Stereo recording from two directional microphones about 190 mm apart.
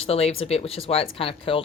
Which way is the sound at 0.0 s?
30° left (ahead or behind).